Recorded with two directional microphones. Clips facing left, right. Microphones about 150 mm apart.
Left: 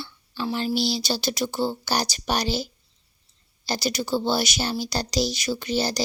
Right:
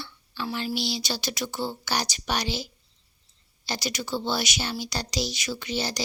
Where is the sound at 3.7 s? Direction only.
35° left (ahead or behind).